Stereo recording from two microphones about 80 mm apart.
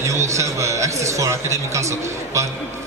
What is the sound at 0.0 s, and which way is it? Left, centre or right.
A man's voice, right.